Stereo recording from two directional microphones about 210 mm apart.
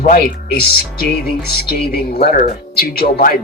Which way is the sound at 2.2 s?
45° left (ahead or behind).